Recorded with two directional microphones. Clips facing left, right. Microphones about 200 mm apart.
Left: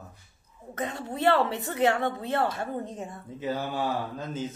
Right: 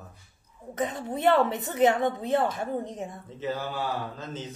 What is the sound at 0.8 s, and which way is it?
A woman's voice, 20° right (ahead or behind).